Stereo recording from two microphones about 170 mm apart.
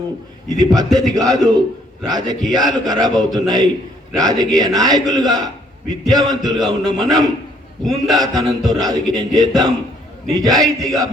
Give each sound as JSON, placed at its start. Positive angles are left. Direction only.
{"t": 0.6, "sound": "chant", "side_deg": -25}